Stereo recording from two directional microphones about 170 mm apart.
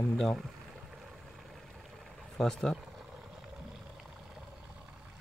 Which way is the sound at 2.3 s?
5° left (ahead or behind).